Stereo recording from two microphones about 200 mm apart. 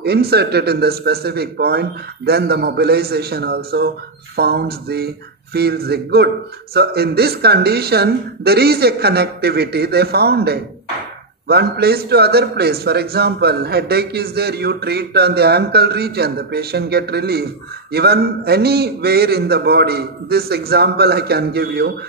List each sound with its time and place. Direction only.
0.0 s speech: 55° right (ahead or behind)